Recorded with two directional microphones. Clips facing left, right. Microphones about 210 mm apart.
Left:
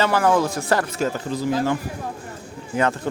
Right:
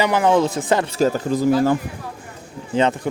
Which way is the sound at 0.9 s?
35° right (ahead or behind).